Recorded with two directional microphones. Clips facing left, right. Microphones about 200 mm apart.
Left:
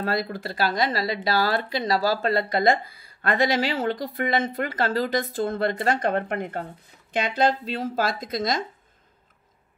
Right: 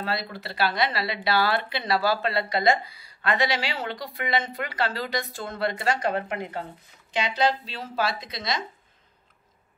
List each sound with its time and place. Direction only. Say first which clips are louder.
0.0 s a woman's voice: left 4 dB; 45° left (ahead or behind)